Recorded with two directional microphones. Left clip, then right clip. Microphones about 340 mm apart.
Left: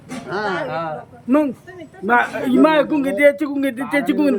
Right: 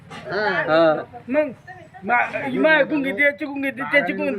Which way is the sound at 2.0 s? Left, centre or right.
Centre.